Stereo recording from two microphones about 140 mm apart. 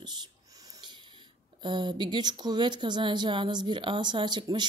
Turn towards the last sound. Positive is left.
turn(degrees=-30)  # may be behind; listen again after turning